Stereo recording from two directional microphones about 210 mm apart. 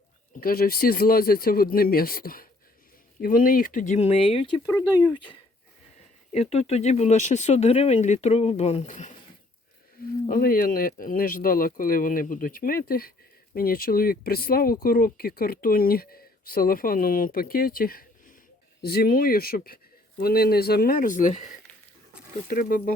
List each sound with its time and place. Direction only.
0.3 s speech: 45° left (ahead or behind)
10.2 s speech: 40° left (ahead or behind)